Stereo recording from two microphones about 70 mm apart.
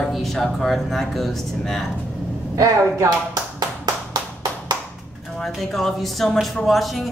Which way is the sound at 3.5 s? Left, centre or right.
Right.